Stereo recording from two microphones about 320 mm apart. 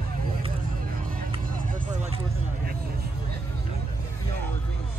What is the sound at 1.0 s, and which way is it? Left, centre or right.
Vehicle, right.